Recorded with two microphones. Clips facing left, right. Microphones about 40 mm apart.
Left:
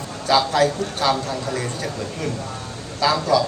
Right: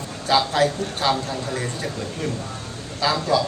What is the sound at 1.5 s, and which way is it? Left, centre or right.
Speech, right.